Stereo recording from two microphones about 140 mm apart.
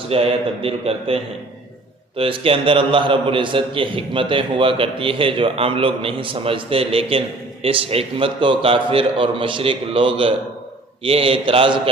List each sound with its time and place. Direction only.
0.1 s a man's voice: 45° right (ahead or behind)